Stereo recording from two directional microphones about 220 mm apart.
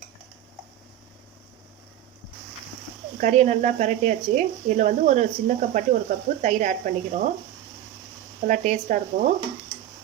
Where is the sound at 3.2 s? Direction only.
35° right (ahead or behind).